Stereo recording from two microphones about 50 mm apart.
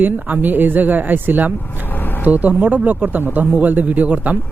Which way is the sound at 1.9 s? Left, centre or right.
Left.